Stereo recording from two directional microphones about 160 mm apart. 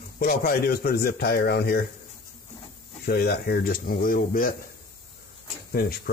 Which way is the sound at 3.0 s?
75° left (ahead or behind).